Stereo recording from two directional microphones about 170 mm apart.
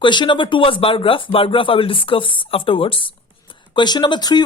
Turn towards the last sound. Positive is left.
turn(degrees=25)  # may be behind; listen again after turning